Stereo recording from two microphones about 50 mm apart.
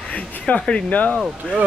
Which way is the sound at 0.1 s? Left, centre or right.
Left.